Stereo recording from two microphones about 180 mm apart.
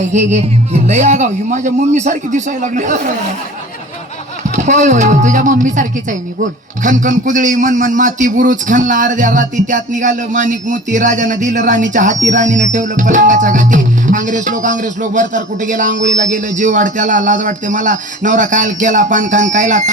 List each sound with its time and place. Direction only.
0.1 s a woman's voice: 40° right (ahead or behind)
4.5 s a woman's voice: 40° right (ahead or behind)